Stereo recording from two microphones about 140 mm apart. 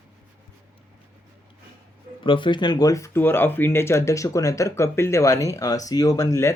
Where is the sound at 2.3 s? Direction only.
35° left (ahead or behind).